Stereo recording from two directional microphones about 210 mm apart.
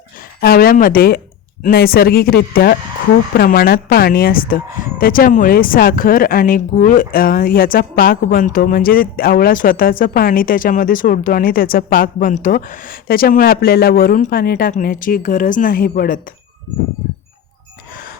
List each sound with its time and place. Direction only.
0.3 s speech: 45° left (ahead or behind)